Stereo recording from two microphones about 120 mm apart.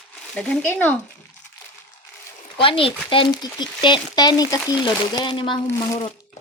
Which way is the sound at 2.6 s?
50° left (ahead or behind).